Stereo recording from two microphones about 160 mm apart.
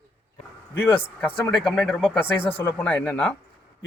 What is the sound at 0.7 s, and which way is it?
Speech, 10° left (ahead or behind).